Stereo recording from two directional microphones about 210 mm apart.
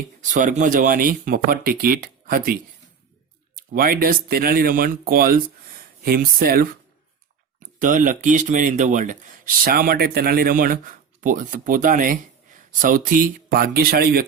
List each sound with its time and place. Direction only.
0.2 s speech: 35° right (ahead or behind)
7.8 s speech: 40° right (ahead or behind)